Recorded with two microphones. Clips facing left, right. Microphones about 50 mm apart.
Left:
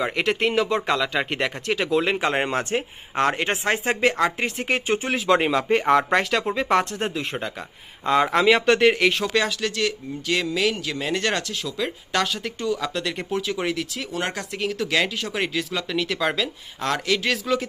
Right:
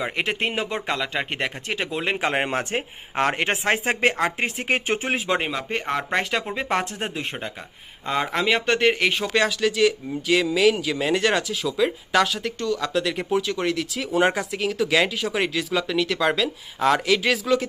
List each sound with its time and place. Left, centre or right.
0.0 s speech: centre
3.3 s speech: right
5.3 s speech: centre
12.6 s speech: centre
12.9 s speech: centre
14.1 s speech: centre
14.5 s speech: centre